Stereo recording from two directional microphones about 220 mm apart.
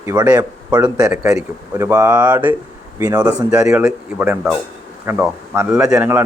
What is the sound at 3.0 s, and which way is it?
Speech, 15° right (ahead or behind).